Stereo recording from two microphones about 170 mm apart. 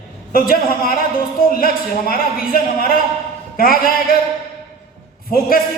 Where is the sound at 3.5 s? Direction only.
60° left (ahead or behind).